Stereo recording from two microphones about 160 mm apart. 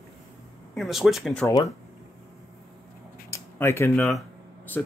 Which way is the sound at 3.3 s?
15° left (ahead or behind).